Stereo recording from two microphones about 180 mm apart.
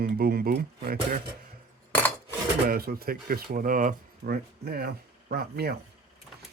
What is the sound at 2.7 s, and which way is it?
Speech, 55° right (ahead or behind).